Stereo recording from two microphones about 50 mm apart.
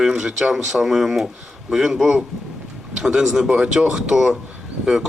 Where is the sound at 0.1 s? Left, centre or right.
Centre.